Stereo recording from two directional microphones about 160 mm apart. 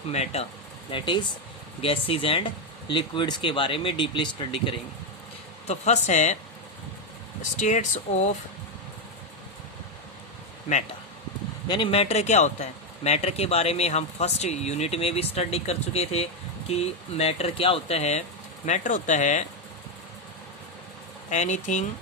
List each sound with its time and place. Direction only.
0.1 s speech: 45° left (ahead or behind)
0.9 s speech: 30° left (ahead or behind)
5.6 s speech: 45° left (ahead or behind)
7.5 s speech: 45° left (ahead or behind)
11.7 s speech: 35° left (ahead or behind)
21.2 s speech: 50° left (ahead or behind)